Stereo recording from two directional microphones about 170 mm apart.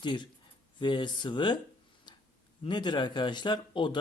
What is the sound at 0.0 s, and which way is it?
Speech, 25° left (ahead or behind).